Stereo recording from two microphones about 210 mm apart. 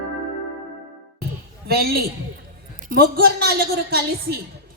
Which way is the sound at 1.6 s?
45° right (ahead or behind).